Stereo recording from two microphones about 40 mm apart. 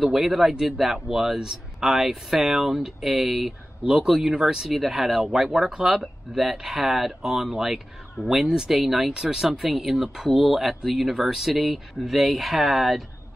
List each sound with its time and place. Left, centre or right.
0.0 s speech: centre
3.8 s speech: centre
9.1 s speech: centre
9.4 s speech: centre